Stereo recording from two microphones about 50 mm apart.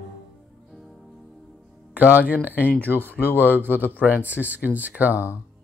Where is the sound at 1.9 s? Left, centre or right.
Right.